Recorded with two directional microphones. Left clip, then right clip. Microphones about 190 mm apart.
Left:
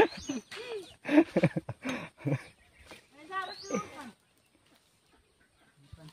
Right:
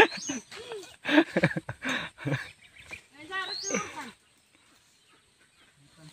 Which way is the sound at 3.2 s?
55° left (ahead or behind).